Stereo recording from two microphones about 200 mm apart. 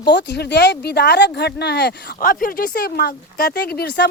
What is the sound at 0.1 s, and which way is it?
Speech, 60° left (ahead or behind).